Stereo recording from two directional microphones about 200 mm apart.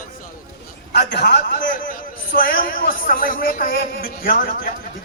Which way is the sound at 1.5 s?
40° left (ahead or behind).